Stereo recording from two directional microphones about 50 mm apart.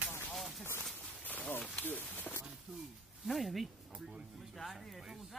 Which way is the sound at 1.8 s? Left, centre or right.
Left.